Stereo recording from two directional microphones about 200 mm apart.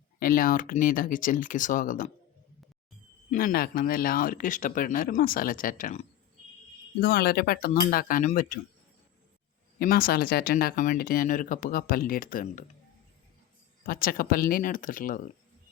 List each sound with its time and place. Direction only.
0.2 s speech: 45° left (ahead or behind)
3.2 s speech: 45° left (ahead or behind)
9.7 s speech: 45° left (ahead or behind)
13.8 s speech: 45° left (ahead or behind)